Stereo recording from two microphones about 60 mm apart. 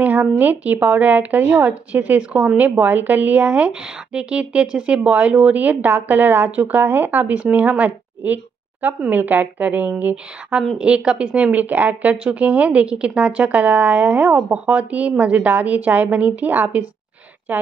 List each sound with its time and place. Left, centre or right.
0.0 s a woman's voice: right
10.8 s a woman's voice: centre; by 17.6 s right